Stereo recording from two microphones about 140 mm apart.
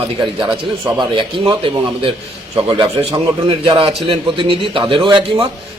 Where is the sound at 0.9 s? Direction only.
35° right (ahead or behind).